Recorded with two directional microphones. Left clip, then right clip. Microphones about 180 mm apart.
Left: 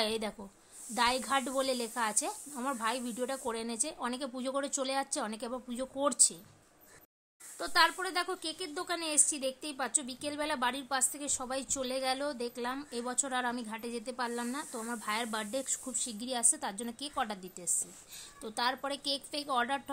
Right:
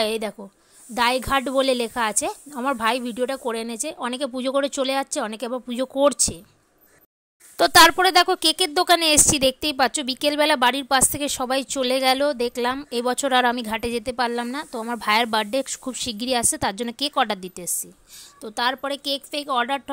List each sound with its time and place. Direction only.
0.0 s speech: 35° right (ahead or behind)
7.5 s a woman's voice: 55° right (ahead or behind); by 19.8 s 35° right (ahead or behind)